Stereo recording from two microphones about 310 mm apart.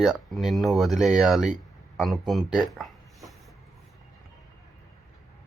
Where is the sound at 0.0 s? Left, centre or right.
Centre.